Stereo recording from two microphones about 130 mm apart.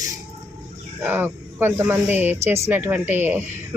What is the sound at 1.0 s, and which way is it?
Speech, 15° right (ahead or behind).